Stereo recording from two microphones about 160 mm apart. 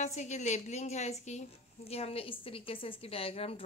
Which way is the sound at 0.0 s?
45° left (ahead or behind).